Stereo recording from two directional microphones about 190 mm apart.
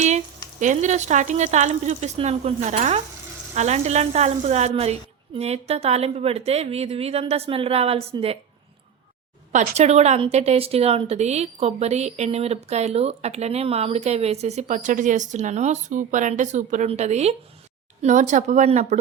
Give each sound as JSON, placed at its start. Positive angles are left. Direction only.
{"t": 0.6, "sound": "a woman's voice", "side_deg": -40}
{"t": 9.5, "sound": "a woman's voice", "side_deg": -40}